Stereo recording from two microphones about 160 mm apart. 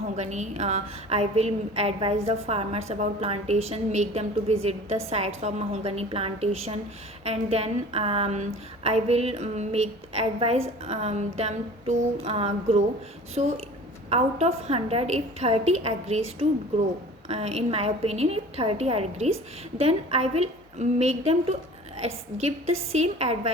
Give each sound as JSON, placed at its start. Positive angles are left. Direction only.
{"t": 0.2, "sound": "a woman's voice", "side_deg": -45}